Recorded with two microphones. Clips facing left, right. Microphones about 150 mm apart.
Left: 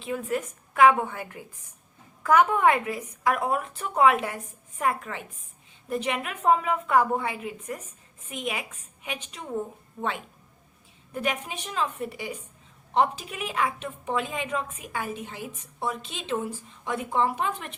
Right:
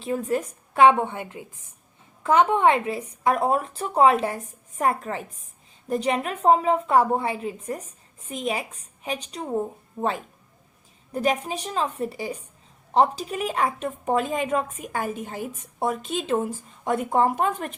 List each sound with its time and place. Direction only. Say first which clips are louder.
0.0 s a woman's voice: right 4 dB; 35° right (ahead or behind)